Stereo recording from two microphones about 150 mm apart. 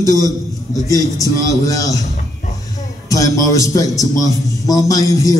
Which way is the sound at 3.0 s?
20° left (ahead or behind).